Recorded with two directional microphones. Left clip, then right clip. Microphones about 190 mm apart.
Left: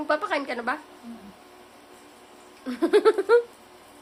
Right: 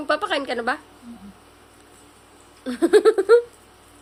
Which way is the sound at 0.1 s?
25° right (ahead or behind).